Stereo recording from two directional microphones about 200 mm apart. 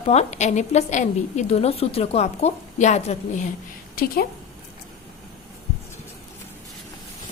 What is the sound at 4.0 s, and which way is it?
Speech, 45° left (ahead or behind).